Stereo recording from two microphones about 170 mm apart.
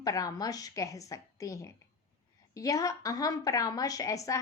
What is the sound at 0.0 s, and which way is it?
A woman's voice, 20° left (ahead or behind).